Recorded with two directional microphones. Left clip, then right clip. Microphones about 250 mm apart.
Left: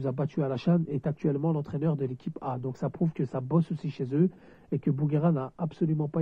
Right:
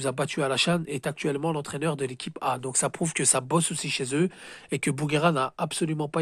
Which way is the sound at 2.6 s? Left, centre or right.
Right.